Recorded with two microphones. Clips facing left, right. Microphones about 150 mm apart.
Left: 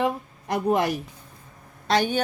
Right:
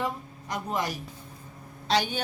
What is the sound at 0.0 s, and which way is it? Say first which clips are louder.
A woman's voice: left 7 dB; 55° left (ahead or behind).